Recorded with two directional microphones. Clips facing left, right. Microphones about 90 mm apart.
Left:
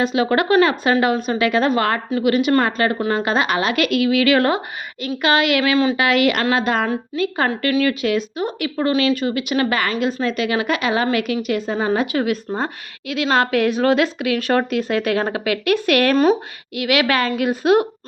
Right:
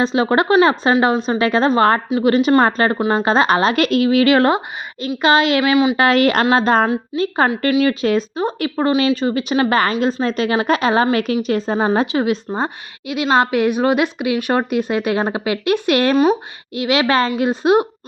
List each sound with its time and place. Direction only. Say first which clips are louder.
0.0 s a woman's voice: right 2 dB; 30° right (ahead or behind)
3.0 s a woman's voice: right 4 dB; 25° right (ahead or behind)
5.7 s speech: right 2 dB; 15° right (ahead or behind)
6.0 s a woman's voice: right 3 dB; 35° right (ahead or behind)
8.0 s a woman's voice: right 3 dB; 35° right (ahead or behind)
16.1 s speech: right 1 dB; 5° right (ahead or behind)
16.7 s a woman's voice: right 2 dB; 25° right (ahead or behind)